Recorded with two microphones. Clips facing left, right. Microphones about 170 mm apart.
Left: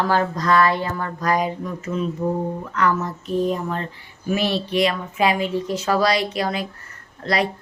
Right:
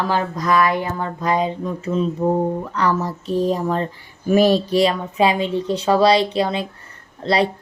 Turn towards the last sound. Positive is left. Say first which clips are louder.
# right 4 dB
turn(degrees=-30)  # may be behind; listen again after turning